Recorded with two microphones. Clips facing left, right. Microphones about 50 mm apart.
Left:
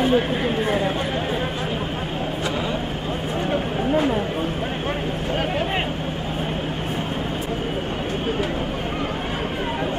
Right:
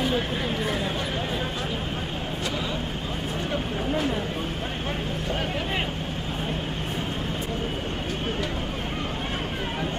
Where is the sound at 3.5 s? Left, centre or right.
Left.